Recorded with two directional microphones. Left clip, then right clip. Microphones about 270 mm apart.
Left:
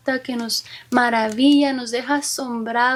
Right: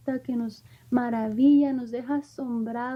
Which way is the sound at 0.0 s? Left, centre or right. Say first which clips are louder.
Left 7 dB; centre.